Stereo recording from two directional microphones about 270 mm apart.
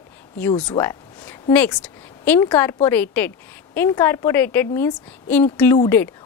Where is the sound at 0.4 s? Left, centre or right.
Centre.